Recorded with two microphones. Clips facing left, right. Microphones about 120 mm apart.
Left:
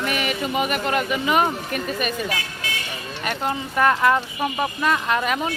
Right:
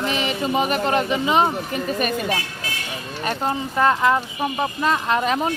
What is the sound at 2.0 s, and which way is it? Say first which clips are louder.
Speech: right 3 dB; 35° right (ahead or behind).